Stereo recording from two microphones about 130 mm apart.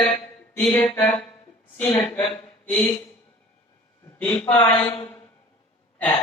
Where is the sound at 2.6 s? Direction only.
10° left (ahead or behind).